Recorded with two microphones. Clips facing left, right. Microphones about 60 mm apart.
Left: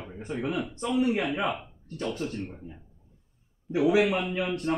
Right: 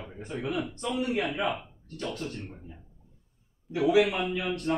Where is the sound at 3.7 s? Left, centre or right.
Left.